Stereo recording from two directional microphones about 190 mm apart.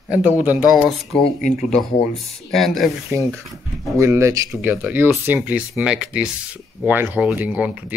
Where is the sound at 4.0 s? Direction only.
15° right (ahead or behind).